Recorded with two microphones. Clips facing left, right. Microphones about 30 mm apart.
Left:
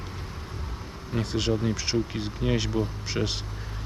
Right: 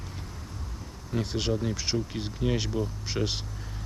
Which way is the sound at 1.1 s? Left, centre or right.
Left.